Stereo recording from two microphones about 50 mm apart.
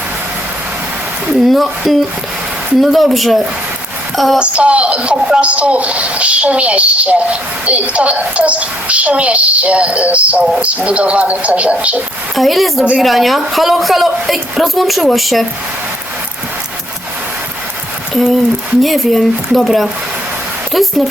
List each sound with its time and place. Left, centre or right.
1.3 s a woman's voice: centre
4.4 s speech: right
12.4 s a woman's voice: centre
18.1 s a woman's voice: centre